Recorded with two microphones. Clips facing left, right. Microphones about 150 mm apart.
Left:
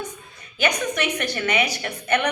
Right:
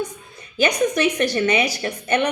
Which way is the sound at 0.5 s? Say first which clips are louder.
Right 5 dB; 35° right (ahead or behind).